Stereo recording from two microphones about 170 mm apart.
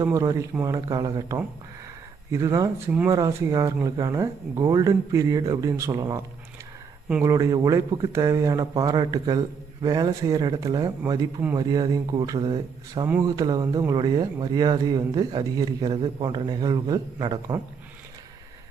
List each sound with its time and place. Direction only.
0.0 s speech: 20° right (ahead or behind)
7.3 s speech: 20° right (ahead or behind)